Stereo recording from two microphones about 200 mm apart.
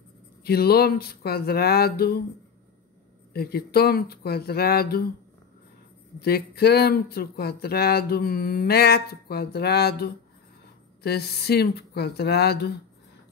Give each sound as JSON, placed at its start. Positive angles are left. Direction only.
{"t": 0.4, "sound": "speech", "side_deg": 50}
{"t": 3.3, "sound": "speech", "side_deg": 50}
{"t": 6.1, "sound": "speech", "side_deg": 50}